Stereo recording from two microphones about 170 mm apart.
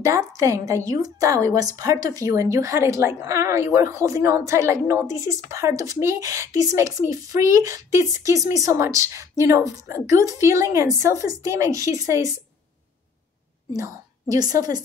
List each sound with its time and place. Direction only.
0.0 s a woman's voice: 20° right (ahead or behind)
14.3 s a woman's voice: 20° right (ahead or behind)